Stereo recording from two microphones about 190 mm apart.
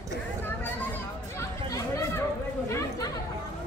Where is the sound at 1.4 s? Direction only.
15° left (ahead or behind).